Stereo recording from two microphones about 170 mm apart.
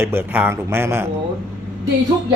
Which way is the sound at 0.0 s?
15° right (ahead or behind).